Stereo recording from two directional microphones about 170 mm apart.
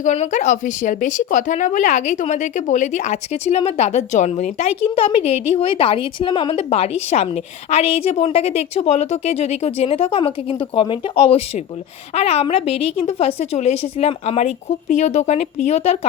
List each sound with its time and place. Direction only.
0.0 s speech: 45° left (ahead or behind)